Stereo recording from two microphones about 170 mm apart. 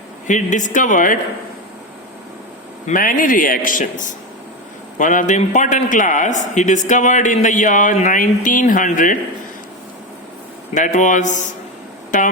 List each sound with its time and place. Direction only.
0.3 s speech: 45° left (ahead or behind)
2.8 s speech: 50° left (ahead or behind)
10.8 s speech: 45° left (ahead or behind)